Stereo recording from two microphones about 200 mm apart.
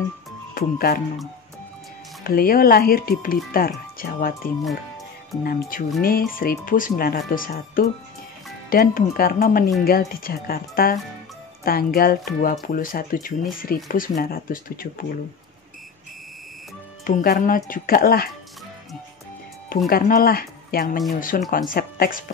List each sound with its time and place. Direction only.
0.6 s speech: 50° left (ahead or behind)
2.2 s speech: 45° left (ahead or behind)
5.4 s speech: 45° left (ahead or behind)
17.0 s speech: 45° left (ahead or behind)
19.9 s speech: 45° left (ahead or behind)